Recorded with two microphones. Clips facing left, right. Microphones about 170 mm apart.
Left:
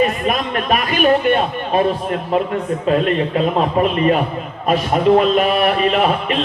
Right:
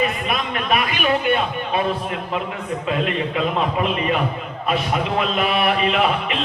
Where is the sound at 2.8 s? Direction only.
40° left (ahead or behind).